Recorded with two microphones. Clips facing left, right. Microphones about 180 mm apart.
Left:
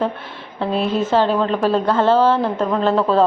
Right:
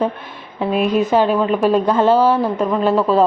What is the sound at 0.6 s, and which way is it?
A woman's voice, 15° right (ahead or behind).